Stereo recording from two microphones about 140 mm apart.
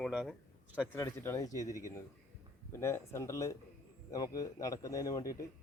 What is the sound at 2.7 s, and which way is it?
Speech, 20° left (ahead or behind).